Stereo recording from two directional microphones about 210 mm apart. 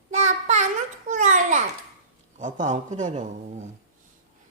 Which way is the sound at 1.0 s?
35° right (ahead or behind).